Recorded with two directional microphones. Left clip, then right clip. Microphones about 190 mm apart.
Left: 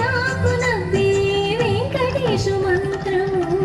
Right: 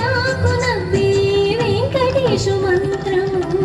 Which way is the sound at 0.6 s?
30° right (ahead or behind).